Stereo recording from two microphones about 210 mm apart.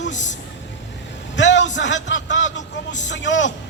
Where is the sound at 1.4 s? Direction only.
60° left (ahead or behind).